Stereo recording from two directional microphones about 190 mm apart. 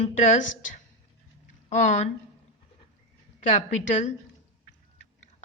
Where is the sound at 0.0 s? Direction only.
35° left (ahead or behind).